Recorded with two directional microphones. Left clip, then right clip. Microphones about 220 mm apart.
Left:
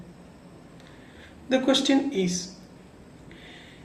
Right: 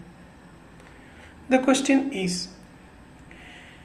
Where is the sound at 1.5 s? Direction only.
40° right (ahead or behind).